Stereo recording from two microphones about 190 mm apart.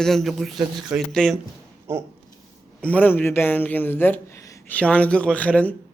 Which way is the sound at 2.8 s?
10° left (ahead or behind).